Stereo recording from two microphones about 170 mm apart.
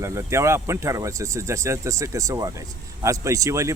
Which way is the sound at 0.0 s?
15° right (ahead or behind).